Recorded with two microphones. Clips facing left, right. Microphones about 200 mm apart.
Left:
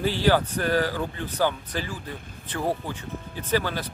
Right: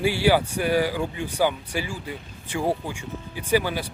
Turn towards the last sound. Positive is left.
turn(degrees=-10)  # may be behind; listen again after turning